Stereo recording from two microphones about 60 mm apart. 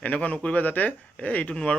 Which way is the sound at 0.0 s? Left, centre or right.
Left.